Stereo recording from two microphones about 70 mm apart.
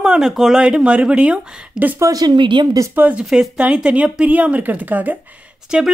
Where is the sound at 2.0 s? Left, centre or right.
Right.